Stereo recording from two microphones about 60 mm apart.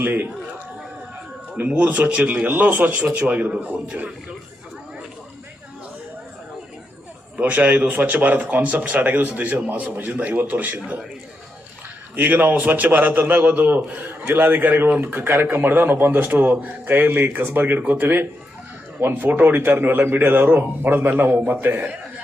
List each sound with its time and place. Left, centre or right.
0.0 s a man's voice: right
1.5 s speech: right
7.3 s speech: right
12.1 s a man's voice: right